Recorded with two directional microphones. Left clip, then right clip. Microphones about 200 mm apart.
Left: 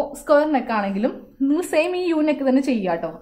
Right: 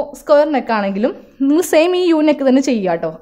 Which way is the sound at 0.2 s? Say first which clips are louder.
Right 5 dB; 45° right (ahead or behind).